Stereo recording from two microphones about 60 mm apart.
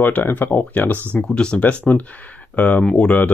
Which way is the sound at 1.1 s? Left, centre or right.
Centre.